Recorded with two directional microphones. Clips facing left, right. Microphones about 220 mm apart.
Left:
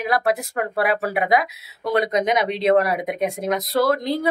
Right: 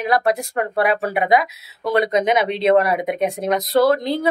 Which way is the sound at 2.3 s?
25° right (ahead or behind).